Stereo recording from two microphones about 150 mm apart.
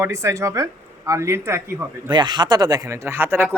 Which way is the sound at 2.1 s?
30° right (ahead or behind).